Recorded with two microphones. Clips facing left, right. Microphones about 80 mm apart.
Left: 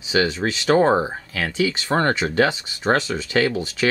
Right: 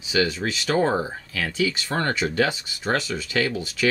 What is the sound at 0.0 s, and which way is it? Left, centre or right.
Speech, left.